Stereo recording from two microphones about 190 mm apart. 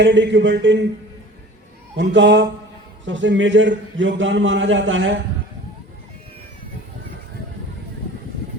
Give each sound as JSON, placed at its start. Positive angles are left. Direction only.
{"t": 0.0, "sound": "a man's voice", "side_deg": -70}
{"t": 2.0, "sound": "a man's voice", "side_deg": -65}
{"t": 3.0, "sound": "a man's voice", "side_deg": -75}